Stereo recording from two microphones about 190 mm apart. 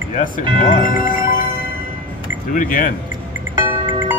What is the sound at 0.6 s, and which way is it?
Speech, 45° left (ahead or behind).